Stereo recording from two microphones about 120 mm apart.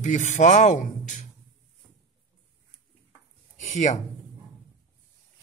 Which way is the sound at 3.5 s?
85° left.